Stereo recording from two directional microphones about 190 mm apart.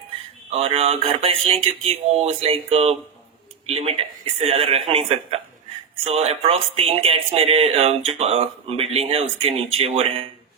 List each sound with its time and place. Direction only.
0.5 s speech: 30° right (ahead or behind)